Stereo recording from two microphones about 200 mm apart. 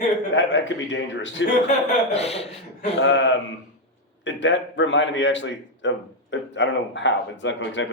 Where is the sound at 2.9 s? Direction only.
60° left (ahead or behind).